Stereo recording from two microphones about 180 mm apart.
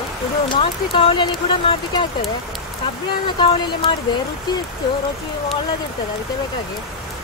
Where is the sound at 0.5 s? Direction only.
30° left (ahead or behind).